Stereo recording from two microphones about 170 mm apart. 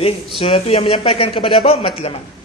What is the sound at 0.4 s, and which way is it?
A man's voice, 35° left (ahead or behind).